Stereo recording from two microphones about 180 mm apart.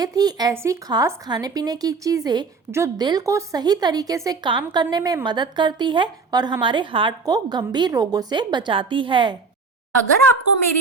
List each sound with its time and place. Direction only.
0.0 s speech: 20° right (ahead or behind)